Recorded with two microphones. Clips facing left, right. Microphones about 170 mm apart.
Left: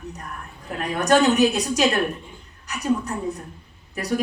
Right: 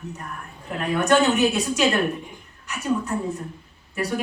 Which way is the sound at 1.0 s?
40° left (ahead or behind).